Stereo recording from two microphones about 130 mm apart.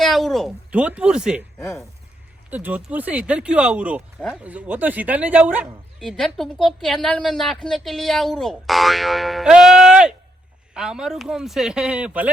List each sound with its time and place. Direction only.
0.0 s speech: centre (ahead or behind)
0.7 s speech: 10° right (ahead or behind)
1.5 s speech: 20° left (ahead or behind)
2.5 s speech: 15° right (ahead or behind)
6.0 s a woman's voice: 5° left (ahead or behind)